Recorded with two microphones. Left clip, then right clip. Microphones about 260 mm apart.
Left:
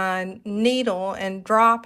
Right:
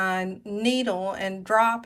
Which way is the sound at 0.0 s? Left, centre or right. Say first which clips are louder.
Left 1 dB; left.